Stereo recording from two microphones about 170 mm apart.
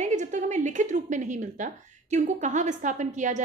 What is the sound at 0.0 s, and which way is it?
A woman's voice, 45° right (ahead or behind).